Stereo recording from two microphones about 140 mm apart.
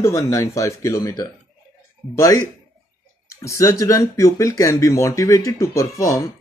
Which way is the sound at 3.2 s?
20° left (ahead or behind).